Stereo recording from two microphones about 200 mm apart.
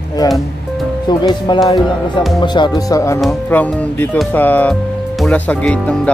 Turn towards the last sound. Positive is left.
turn(degrees=5)  # may be behind; listen again after turning